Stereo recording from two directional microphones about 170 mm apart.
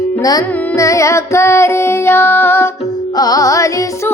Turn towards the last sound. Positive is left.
turn(degrees=20)  # may be behind; listen again after turning